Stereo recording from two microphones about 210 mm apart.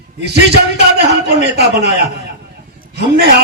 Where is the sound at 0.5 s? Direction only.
50° right (ahead or behind).